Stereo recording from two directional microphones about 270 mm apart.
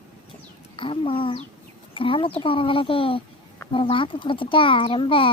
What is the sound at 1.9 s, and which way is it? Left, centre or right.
Speech, centre.